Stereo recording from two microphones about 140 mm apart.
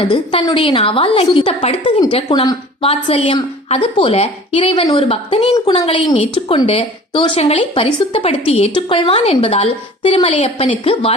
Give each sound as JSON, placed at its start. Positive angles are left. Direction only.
{"t": 0.1, "sound": "a woman's voice", "side_deg": 35}
{"t": 2.9, "sound": "a woman's voice", "side_deg": 45}